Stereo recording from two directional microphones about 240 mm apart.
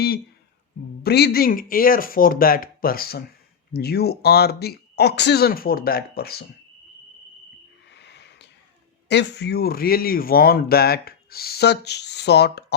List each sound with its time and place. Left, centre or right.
1.0 s a man's voice: left
7.9 s a sound: left
9.0 s a man's voice: left